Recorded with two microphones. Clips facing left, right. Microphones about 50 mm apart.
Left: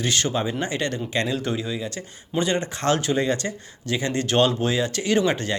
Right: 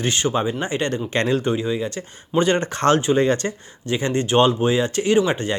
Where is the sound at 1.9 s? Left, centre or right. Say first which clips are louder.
Right 5 dB; right.